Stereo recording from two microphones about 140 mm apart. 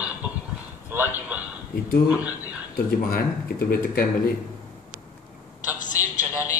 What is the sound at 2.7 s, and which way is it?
Speech, 90° left.